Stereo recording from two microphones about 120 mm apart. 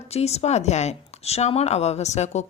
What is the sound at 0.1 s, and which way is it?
A woman's voice, 60° left (ahead or behind).